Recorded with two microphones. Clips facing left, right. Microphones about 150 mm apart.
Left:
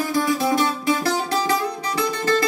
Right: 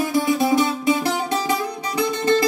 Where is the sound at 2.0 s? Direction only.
20° right (ahead or behind).